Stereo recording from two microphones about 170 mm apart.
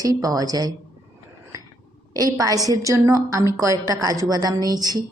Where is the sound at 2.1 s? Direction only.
20° right (ahead or behind).